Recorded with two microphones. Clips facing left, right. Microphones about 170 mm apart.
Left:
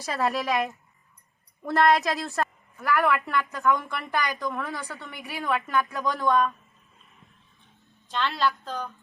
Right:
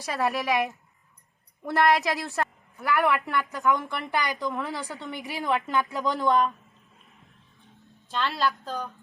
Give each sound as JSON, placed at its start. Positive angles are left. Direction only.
{"t": 0.0, "sound": "a woman's voice", "side_deg": 0}
{"t": 1.6, "sound": "a woman's voice", "side_deg": 0}
{"t": 3.0, "sound": "speech", "side_deg": -20}
{"t": 8.1, "sound": "a woman's voice", "side_deg": -5}